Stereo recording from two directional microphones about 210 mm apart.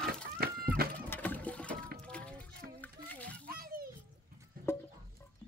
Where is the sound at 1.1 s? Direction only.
10° left (ahead or behind).